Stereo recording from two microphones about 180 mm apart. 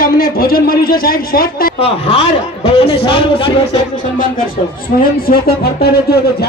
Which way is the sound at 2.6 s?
35° left (ahead or behind).